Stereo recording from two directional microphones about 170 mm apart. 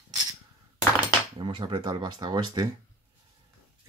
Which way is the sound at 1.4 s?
30° right (ahead or behind).